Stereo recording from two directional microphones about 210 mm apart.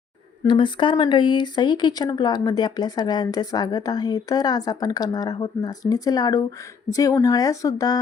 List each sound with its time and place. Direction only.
0.4 s speech: 25° left (ahead or behind)